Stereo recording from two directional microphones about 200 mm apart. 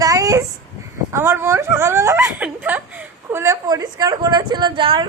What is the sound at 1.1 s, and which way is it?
Speech, 15° right (ahead or behind).